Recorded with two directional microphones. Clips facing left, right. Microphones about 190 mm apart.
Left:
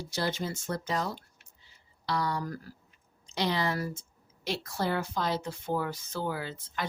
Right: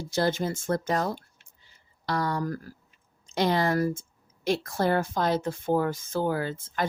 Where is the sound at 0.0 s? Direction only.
50° right (ahead or behind).